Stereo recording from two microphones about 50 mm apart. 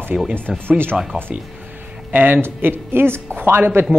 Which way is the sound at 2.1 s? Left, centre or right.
Right.